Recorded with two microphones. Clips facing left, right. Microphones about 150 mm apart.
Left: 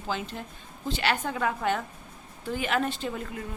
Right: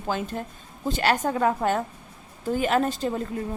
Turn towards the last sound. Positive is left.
turn(degrees=-40)  # may be behind; listen again after turning